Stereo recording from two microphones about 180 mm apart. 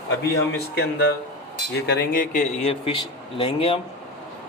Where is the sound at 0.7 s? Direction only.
60° left (ahead or behind); by 3.8 s 30° left (ahead or behind).